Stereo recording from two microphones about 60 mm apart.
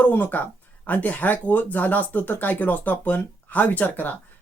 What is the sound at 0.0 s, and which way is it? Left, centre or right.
Speech, left.